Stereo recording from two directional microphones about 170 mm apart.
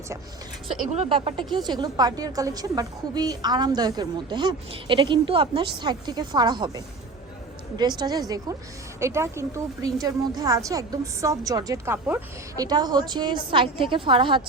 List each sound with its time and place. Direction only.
0.9 s a woman's voice: 35° right (ahead or behind)